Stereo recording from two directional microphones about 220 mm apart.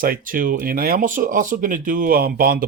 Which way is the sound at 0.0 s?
40° right (ahead or behind).